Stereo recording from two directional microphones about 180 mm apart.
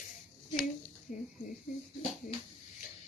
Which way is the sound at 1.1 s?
50° left (ahead or behind).